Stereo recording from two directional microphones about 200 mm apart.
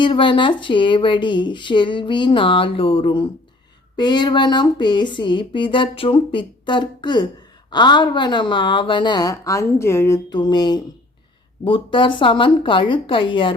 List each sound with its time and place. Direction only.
0.0 s speech: 25° left (ahead or behind)